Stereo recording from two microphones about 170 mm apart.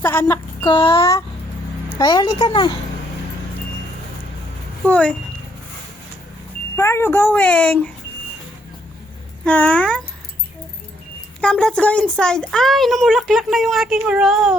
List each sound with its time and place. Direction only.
0.0 s speech: 10° left (ahead or behind)
0.6 s speech: 30° left (ahead or behind)
0.9 s speech: 20° left (ahead or behind)
4.9 s speech: 5° left (ahead or behind)
6.7 s speech: 15° left (ahead or behind)
9.4 s speech: 5° left (ahead or behind)
11.3 s speech: 5° left (ahead or behind)